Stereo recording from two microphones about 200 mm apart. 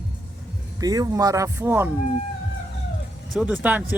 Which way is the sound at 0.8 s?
20° right (ahead or behind).